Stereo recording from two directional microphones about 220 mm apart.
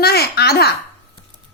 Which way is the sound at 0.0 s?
45° left (ahead or behind).